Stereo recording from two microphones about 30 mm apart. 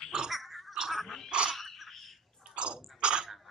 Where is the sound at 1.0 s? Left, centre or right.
Centre.